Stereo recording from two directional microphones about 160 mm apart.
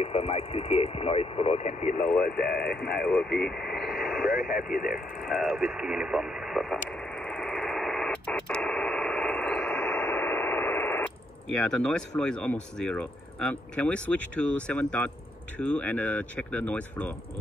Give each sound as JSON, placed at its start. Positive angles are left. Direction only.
{"t": 0.0, "sound": "speech", "side_deg": 40}
{"t": 1.8, "sound": "speech", "side_deg": 45}
{"t": 2.2, "sound": "speech", "side_deg": 80}
{"t": 2.8, "sound": "speech", "side_deg": 5}
{"t": 4.0, "sound": "radio", "side_deg": 0}
{"t": 4.5, "sound": "speech", "side_deg": 60}
{"t": 4.8, "sound": "radio", "side_deg": 0}
{"t": 11.5, "sound": "speech", "side_deg": 5}